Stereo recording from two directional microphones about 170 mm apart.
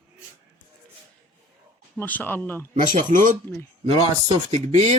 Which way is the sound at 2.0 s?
10° left (ahead or behind).